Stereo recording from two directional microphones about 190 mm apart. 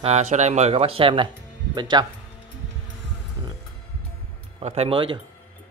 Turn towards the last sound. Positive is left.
turn(degrees=-25)  # may be behind; listen again after turning